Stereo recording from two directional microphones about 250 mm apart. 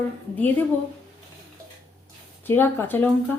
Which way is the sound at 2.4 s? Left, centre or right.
Centre.